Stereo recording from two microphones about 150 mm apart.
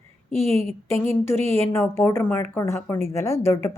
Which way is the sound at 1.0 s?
15° left (ahead or behind).